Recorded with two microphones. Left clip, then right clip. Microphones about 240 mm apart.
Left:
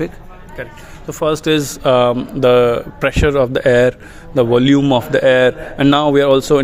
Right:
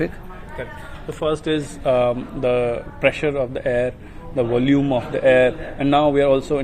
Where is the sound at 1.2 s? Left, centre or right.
Left.